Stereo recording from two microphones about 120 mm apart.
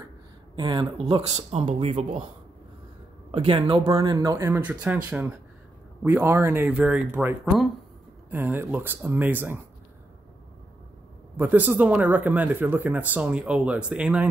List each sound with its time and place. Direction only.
0.6 s speech: 40° right (ahead or behind); by 2.2 s 80° right
3.3 s speech: 50° right (ahead or behind)
3.8 s speech: 30° right (ahead or behind)
4.5 s speech: 15° right (ahead or behind)
7.4 s speech: centre (ahead or behind)
8.3 s speech: 15° right (ahead or behind)
11.3 s speech: 15° right (ahead or behind)